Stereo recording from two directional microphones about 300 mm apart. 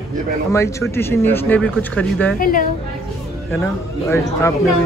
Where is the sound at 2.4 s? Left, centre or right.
Left.